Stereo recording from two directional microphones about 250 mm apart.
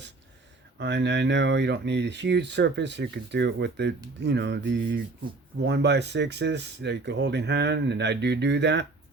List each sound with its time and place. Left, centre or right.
0.8 s speech: right